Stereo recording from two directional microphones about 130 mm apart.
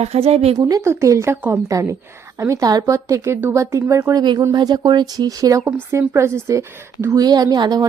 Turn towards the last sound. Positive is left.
turn(degrees=-30)  # may be behind; listen again after turning